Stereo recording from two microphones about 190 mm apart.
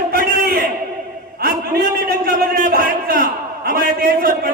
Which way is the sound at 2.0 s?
55° right (ahead or behind).